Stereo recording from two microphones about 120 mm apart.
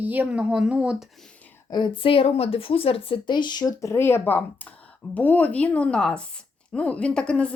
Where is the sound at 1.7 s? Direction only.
40° left (ahead or behind); by 7.5 s 10° left (ahead or behind).